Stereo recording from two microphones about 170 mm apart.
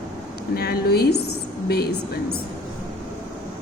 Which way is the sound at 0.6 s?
65° left (ahead or behind).